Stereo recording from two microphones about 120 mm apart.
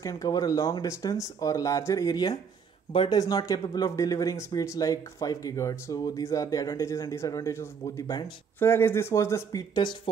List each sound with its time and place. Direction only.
0.0 s speech: 30° left (ahead or behind)